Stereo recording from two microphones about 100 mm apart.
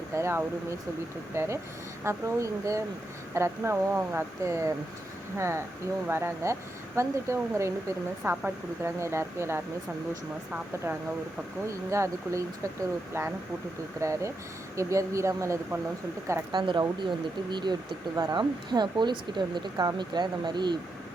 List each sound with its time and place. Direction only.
0.1 s speech: 25° right (ahead or behind)
8.2 s speech: 15° right (ahead or behind)
11.7 s speech: 30° right (ahead or behind)
14.0 s speech: 30° right (ahead or behind)
16.5 s speech: 50° right (ahead or behind)